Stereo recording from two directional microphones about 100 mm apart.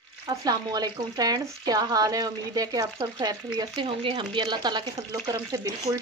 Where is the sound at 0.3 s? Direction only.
40° right (ahead or behind).